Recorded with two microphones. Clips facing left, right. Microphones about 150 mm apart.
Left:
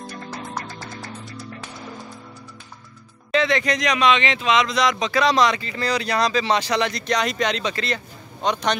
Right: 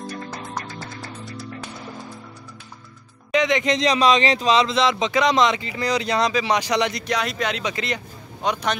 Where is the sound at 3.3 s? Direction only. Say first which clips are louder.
Right 1 dB; 20° right (ahead or behind).